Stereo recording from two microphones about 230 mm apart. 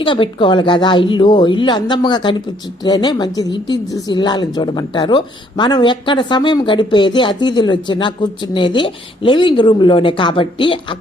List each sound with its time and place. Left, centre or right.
0.0 s a woman's voice: left